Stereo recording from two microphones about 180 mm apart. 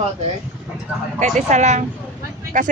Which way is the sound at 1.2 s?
40° right (ahead or behind).